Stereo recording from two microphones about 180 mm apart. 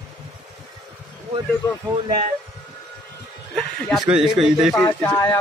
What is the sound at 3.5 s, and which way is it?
A man's voice, centre (ahead or behind).